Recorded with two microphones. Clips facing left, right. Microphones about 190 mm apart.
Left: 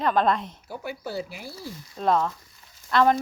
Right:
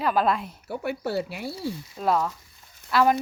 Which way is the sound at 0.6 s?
65° right (ahead or behind).